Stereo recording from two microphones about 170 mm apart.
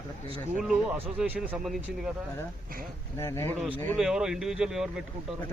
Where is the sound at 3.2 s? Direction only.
15° left (ahead or behind).